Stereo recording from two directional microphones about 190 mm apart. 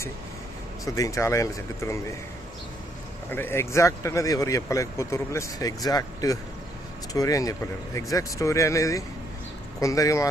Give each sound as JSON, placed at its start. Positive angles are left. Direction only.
{"t": 0.9, "sound": "speech", "side_deg": 15}
{"t": 3.2, "sound": "speech", "side_deg": 10}